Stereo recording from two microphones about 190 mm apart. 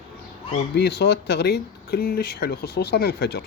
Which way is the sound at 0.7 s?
60° left (ahead or behind).